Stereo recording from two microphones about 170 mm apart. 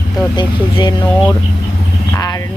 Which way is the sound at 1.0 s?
10° left (ahead or behind).